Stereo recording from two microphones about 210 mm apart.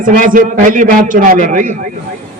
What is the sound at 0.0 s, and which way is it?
A man's voice, 40° right (ahead or behind).